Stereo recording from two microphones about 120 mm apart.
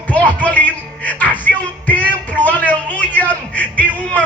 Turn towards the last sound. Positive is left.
turn(degrees=10)  # may be behind; listen again after turning